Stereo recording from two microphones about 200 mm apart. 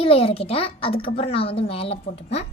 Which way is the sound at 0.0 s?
30° left (ahead or behind).